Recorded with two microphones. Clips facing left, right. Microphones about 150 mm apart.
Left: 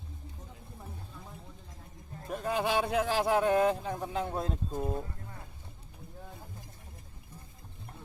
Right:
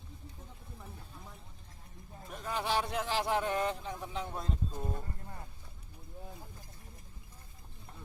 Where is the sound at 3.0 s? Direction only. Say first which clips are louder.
Left 5 dB; 55° left (ahead or behind).